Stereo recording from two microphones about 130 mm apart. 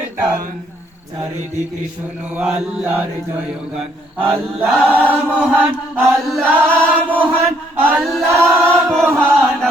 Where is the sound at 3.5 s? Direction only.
5° right (ahead or behind).